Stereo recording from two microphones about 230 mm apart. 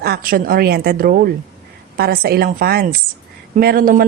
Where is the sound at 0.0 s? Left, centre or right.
Right.